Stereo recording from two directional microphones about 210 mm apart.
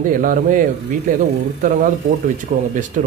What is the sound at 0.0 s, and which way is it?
Speech, 40° right (ahead or behind).